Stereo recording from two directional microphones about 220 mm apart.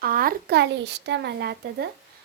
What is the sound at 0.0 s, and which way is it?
A child's voice, 40° right (ahead or behind).